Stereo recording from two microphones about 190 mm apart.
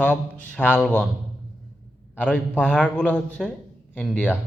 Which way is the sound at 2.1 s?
5° left (ahead or behind).